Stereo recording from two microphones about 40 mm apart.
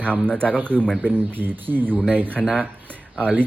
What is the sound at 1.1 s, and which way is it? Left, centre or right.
Speech, right.